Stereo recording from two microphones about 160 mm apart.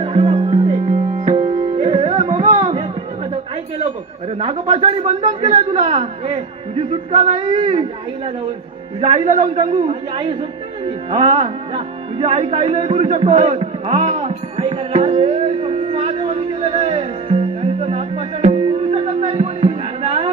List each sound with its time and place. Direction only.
0.0 s music: 40° right (ahead or behind)
4.4 s speech: 35° right (ahead or behind)
7.3 s speech: 35° right (ahead or behind)
9.0 s speech: 40° right (ahead or behind)
11.1 s music: 35° right (ahead or behind)